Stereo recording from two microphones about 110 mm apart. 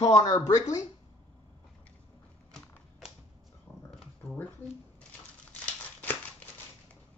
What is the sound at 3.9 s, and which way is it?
Dog, 10° left (ahead or behind).